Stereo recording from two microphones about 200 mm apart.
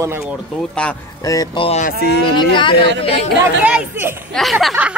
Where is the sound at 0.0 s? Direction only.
10° right (ahead or behind).